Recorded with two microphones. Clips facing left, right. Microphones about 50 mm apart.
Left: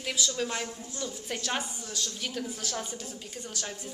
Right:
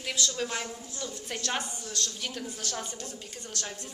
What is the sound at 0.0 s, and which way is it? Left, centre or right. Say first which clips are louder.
A woman's voice: left 1 dB; centre.